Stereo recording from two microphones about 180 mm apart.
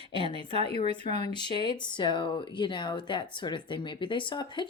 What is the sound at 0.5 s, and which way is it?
Speech, 35° right (ahead or behind).